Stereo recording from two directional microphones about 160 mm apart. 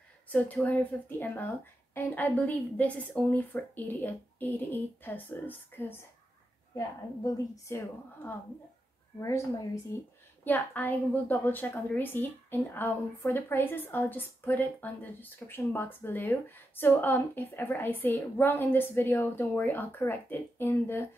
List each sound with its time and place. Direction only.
0.3 s a woman's voice: 10° left (ahead or behind)
7.6 s a woman's voice: 15° left (ahead or behind)
9.9 s a woman's voice: 20° left (ahead or behind)